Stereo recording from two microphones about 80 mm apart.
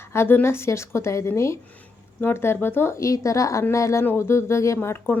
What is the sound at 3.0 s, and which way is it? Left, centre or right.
Speech, left.